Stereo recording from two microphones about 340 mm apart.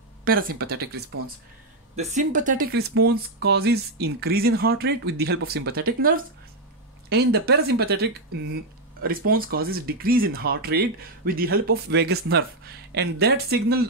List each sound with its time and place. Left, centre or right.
0.2 s speech: right